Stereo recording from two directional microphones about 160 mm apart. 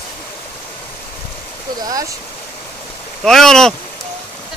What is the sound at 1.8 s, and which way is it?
Speech, 25° right (ahead or behind).